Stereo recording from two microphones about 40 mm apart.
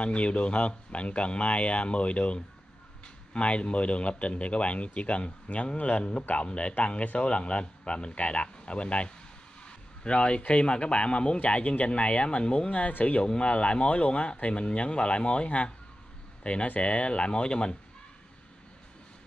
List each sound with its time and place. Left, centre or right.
0.0 s speech: left